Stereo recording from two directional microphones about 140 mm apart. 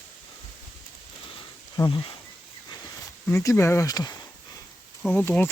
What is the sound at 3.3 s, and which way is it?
Speech, 20° left (ahead or behind).